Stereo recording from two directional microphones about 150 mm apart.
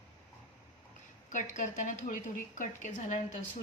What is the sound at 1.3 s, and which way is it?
A woman's voice, 60° left (ahead or behind).